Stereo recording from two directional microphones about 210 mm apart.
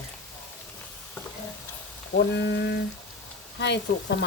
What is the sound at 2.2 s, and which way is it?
Speech, 55° left (ahead or behind).